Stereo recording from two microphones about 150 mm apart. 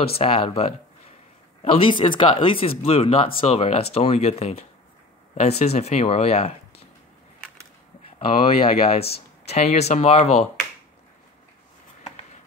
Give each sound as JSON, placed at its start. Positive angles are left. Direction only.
{"t": 0.0, "sound": "speech", "side_deg": 40}
{"t": 8.3, "sound": "speech", "side_deg": 40}